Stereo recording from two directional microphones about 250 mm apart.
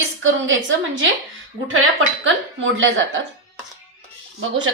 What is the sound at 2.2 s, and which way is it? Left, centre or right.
Speech, right.